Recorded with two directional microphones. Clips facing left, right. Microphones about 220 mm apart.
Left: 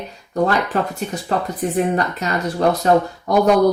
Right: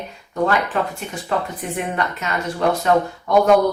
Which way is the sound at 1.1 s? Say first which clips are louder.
Left 2 dB; 35° left (ahead or behind).